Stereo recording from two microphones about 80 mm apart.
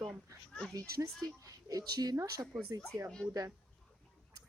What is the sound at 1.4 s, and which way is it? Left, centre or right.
Speech, right.